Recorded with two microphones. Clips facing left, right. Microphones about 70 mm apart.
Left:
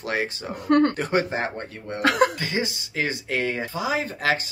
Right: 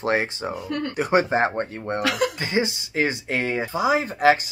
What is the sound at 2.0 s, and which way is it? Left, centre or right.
Speech, left.